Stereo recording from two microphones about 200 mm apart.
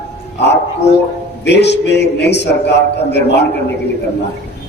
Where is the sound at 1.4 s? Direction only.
60° left (ahead or behind).